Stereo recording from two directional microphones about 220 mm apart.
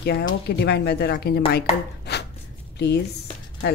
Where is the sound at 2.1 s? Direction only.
50° left (ahead or behind).